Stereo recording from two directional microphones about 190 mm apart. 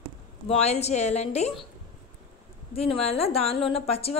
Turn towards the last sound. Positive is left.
turn(degrees=30)  # may be behind; listen again after turning